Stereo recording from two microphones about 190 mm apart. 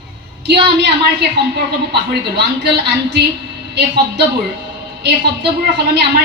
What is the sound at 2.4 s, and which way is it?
Speech, 60° right (ahead or behind).